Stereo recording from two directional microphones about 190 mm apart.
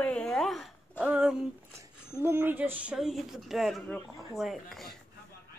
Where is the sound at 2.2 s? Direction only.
10° right (ahead or behind).